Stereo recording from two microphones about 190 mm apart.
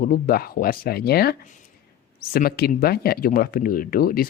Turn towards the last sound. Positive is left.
turn(degrees=50)  # may be behind; listen again after turning